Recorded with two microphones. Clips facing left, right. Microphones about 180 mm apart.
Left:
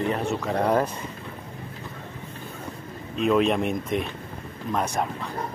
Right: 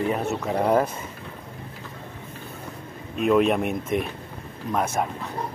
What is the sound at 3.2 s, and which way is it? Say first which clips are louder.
Speech: right 1 dB; 5° right (ahead or behind).